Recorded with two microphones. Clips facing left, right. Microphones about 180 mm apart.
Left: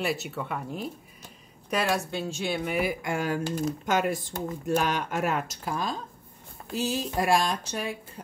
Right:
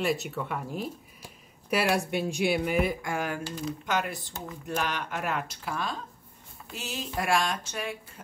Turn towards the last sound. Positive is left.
turn(degrees=35)  # may be behind; listen again after turning